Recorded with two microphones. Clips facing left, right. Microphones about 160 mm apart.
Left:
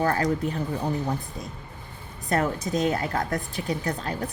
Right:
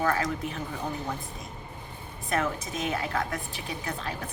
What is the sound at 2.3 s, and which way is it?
A woman's voice, 40° left (ahead or behind).